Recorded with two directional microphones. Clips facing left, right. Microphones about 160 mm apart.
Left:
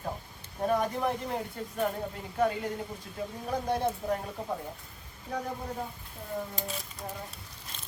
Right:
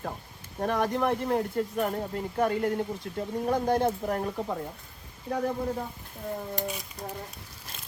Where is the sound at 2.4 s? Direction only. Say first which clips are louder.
Right 2 dB; 55° right (ahead or behind).